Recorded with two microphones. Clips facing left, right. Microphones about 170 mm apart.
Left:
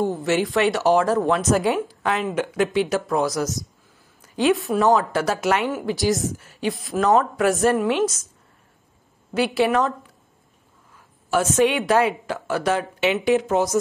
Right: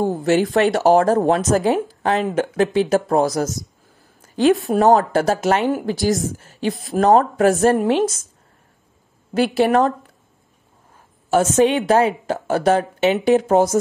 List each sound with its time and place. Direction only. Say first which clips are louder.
0.2 s a woman's voice: right 6 dB; 45° right (ahead or behind)
9.3 s a woman's voice: right 4 dB; 50° right (ahead or behind)
11.3 s a woman's voice: right 4 dB; 25° right (ahead or behind)